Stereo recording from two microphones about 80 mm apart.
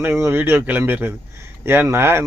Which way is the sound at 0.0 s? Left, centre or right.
Right.